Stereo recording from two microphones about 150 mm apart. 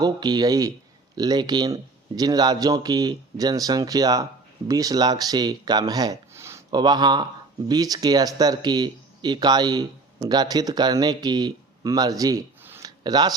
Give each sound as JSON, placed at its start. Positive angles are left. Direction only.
{"t": 0.0, "sound": "speech", "side_deg": -25}
{"t": 12.6, "sound": "a sound", "side_deg": -15}
{"t": 13.0, "sound": "speech", "side_deg": -25}